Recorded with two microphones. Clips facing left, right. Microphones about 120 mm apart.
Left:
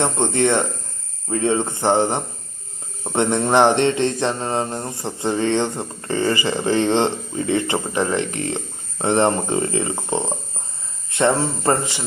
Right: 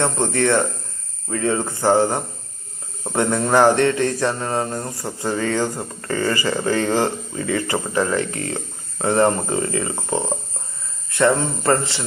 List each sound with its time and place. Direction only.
0.0 s mantra: 20° left (ahead or behind)